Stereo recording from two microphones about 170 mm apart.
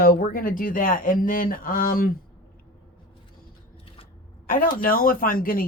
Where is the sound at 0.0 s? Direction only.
60° left (ahead or behind).